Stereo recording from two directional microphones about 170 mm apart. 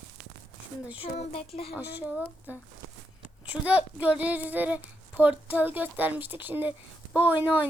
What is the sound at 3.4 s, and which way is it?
Speech, 5° right (ahead or behind).